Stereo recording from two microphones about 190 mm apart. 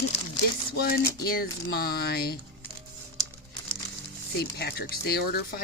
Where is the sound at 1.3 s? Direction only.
55° left (ahead or behind).